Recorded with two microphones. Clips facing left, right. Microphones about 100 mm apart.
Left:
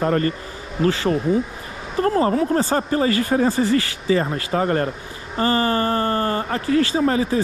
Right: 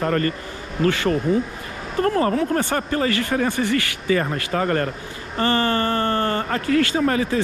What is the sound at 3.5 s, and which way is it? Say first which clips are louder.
Speech: left 3 dB; 65° right (ahead or behind).